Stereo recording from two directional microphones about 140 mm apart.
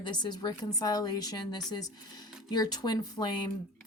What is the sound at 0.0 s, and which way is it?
Speech, 30° left (ahead or behind).